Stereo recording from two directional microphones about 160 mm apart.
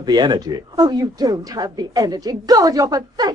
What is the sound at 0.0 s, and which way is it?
Speech, 25° right (ahead or behind).